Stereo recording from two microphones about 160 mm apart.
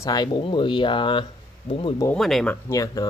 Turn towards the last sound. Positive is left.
turn(degrees=20)  # may be behind; listen again after turning